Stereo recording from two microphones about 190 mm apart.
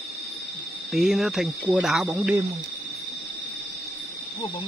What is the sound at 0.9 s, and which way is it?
Speech, centre (ahead or behind).